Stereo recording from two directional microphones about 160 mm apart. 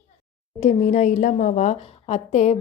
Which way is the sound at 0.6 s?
45° left (ahead or behind).